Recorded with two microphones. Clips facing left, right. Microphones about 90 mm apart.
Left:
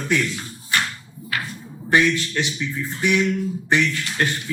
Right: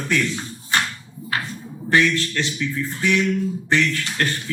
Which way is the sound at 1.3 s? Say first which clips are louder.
Right 2 dB; 30° right (ahead or behind).